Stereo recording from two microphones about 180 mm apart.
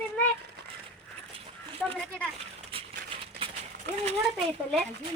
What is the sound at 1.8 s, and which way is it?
Speech, centre (ahead or behind).